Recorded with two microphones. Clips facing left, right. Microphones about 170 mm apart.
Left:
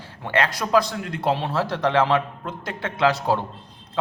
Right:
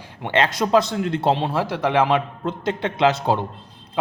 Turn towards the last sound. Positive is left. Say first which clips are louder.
# right 2 dB
turn(degrees=-20)  # may be behind; listen again after turning